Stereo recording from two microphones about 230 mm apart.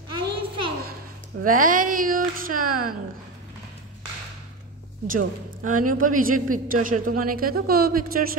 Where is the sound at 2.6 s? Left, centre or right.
Right.